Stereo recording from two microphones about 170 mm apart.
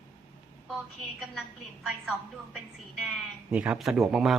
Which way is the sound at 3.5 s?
5° right (ahead or behind).